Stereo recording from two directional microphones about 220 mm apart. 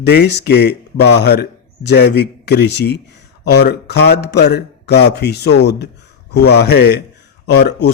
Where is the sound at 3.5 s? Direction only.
50° left (ahead or behind).